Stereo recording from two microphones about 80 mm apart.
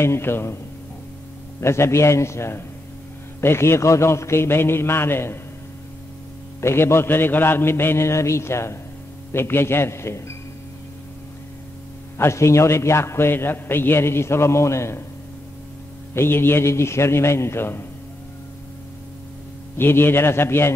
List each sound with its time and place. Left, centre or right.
0.0 s a man's voice: left
1.6 s a man's voice: left
6.6 s a man's voice: left
12.2 s a man's voice: left
16.2 s a man's voice: left
19.8 s a man's voice: left